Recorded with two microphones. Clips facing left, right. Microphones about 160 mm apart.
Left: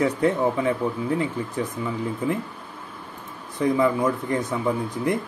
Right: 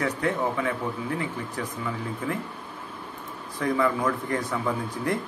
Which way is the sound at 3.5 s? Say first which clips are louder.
Left 4 dB; 20° left (ahead or behind).